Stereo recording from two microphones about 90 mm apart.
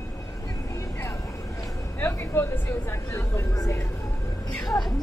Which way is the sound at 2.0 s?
25° left (ahead or behind).